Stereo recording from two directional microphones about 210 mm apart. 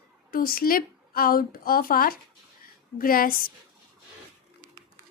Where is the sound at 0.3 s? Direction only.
45° left (ahead or behind).